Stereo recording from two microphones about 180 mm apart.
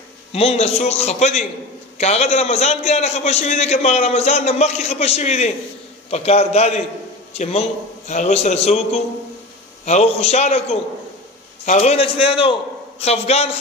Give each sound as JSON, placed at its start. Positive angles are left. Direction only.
{"t": 0.3, "sound": "a man's voice", "side_deg": 35}
{"t": 8.1, "sound": "a man's voice", "side_deg": 40}